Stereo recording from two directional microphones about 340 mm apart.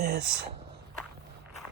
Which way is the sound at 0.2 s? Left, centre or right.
Right.